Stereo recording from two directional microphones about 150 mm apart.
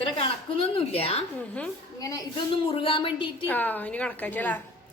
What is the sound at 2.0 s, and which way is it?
Speech, 25° left (ahead or behind).